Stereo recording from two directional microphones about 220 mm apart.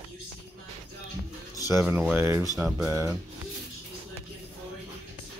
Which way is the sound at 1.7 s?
10° right (ahead or behind).